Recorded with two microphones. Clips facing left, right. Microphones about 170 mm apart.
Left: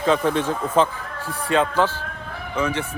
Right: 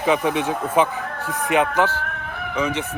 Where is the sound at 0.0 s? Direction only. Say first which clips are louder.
Even; 15° right (ahead or behind).